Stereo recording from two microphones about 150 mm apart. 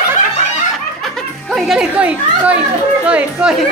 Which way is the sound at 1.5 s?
Centre (ahead or behind).